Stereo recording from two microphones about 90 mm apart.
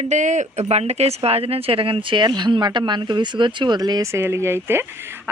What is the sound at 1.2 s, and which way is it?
Speech, 90° right.